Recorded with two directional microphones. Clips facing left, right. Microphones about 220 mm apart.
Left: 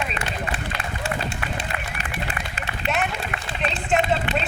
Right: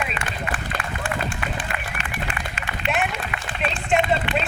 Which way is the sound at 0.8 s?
25° left (ahead or behind).